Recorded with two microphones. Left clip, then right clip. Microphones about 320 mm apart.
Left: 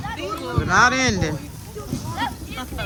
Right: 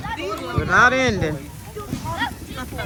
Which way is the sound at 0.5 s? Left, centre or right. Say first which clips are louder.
Right 1 dB; centre.